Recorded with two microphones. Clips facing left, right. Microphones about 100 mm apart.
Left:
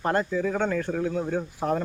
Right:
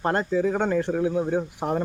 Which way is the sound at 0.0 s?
25° right (ahead or behind).